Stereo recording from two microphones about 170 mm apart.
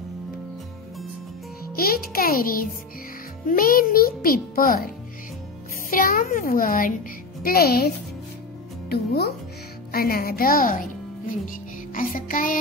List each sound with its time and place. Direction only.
1.8 s a child's voice: 60° left (ahead or behind)
11.2 s music: 50° left (ahead or behind)